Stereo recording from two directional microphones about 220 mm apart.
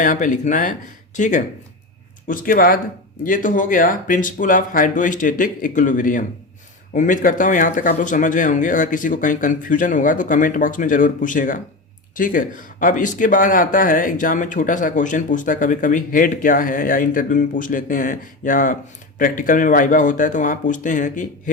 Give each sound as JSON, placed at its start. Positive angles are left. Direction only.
{"t": 0.0, "sound": "speech", "side_deg": 35}